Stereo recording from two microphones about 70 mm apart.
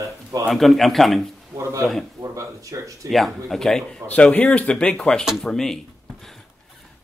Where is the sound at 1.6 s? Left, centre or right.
Right.